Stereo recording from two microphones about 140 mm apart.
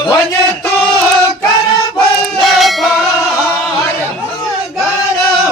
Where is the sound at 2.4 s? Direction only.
Centre (ahead or behind).